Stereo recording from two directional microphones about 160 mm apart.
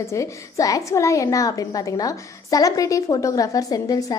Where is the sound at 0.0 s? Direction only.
20° left (ahead or behind).